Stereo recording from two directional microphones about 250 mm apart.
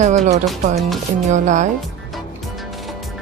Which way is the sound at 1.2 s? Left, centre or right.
Right.